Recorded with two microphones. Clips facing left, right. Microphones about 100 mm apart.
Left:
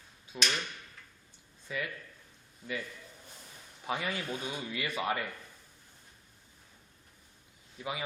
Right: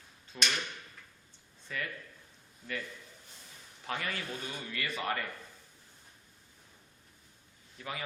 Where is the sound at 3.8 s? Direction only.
15° left (ahead or behind).